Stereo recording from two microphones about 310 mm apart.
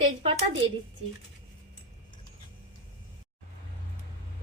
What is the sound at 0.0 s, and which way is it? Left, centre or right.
Speech, centre.